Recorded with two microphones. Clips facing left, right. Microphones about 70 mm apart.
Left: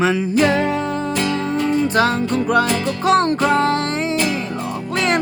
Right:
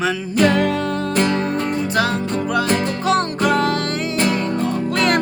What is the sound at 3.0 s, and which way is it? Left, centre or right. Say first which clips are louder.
Music: left 7 dB; left.